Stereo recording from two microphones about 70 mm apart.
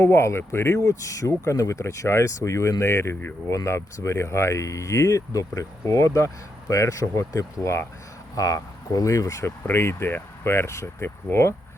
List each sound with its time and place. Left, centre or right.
0.0 s speech: left
0.8 s speech: left
8.4 s speech: left
9.6 s speech: left